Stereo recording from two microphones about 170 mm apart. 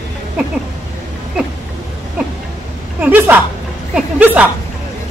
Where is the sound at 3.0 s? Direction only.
10° right (ahead or behind).